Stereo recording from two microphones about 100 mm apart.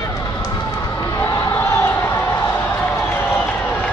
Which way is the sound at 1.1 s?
30° left (ahead or behind).